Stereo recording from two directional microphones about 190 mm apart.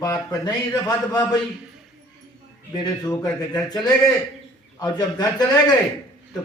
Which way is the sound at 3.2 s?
20° left (ahead or behind).